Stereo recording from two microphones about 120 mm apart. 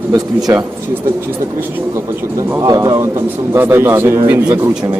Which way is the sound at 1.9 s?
25° right (ahead or behind).